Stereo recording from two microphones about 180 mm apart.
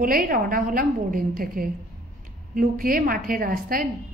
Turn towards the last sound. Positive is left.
turn(degrees=-50)  # may be behind; listen again after turning